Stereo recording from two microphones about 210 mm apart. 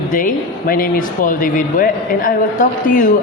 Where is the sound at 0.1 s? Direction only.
40° left (ahead or behind).